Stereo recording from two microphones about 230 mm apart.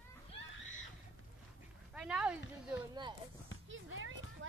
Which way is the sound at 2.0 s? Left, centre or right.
Centre.